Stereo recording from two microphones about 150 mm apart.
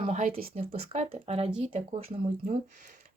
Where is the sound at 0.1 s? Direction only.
55° right (ahead or behind).